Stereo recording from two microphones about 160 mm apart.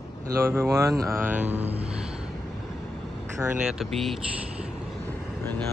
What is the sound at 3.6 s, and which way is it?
Speech, 5° right (ahead or behind).